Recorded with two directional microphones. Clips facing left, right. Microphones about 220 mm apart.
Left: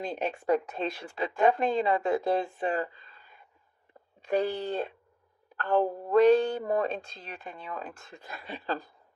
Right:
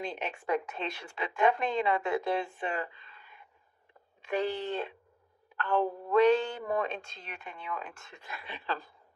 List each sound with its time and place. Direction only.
0.0 s speech: 35° left (ahead or behind)